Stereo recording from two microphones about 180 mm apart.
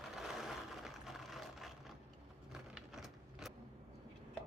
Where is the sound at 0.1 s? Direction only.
Centre (ahead or behind).